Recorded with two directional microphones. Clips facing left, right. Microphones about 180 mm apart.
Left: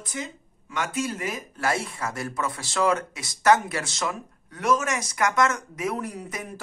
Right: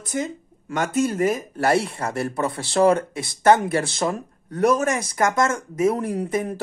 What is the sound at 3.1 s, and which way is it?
Speech, 55° right (ahead or behind).